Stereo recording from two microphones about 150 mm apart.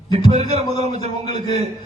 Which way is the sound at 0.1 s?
45° right (ahead or behind).